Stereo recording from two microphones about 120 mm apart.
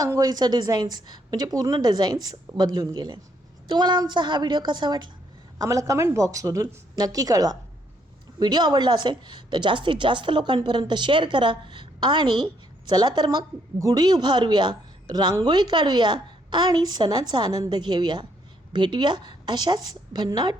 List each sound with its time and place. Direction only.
0.0 s a woman's voice: 30° right (ahead or behind)
5.5 s a woman's voice: 25° right (ahead or behind)